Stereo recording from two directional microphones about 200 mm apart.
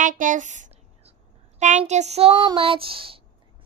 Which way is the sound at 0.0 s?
40° right (ahead or behind).